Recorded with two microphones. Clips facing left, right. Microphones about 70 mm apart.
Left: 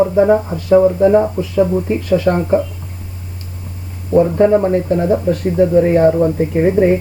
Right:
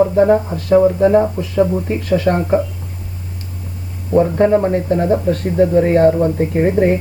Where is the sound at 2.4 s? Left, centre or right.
Centre.